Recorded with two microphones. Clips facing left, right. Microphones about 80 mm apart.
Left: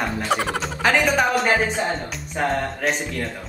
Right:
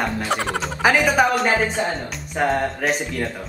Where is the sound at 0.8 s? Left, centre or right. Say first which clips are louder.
Right 2 dB; centre.